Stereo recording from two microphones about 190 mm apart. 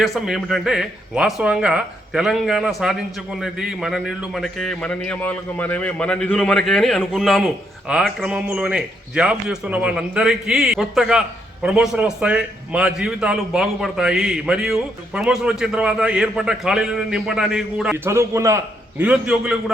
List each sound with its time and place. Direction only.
0.0 s a man's voice: centre (ahead or behind)